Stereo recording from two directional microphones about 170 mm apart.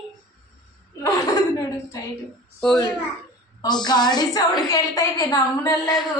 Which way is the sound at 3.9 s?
25° left (ahead or behind).